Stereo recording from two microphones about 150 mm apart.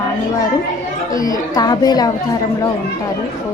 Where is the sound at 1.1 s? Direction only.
25° left (ahead or behind).